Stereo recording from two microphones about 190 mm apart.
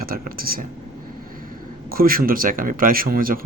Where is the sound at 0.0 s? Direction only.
50° right (ahead or behind).